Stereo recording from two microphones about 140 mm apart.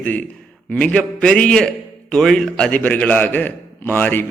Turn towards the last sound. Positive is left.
turn(degrees=15)  # may be behind; listen again after turning